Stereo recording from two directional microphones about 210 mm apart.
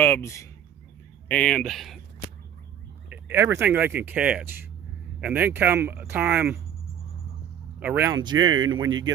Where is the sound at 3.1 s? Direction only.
10° right (ahead or behind).